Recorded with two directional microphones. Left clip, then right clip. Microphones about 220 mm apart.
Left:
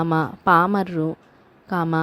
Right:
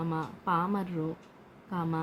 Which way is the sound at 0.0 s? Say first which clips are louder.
Left 13 dB; 45° left (ahead or behind).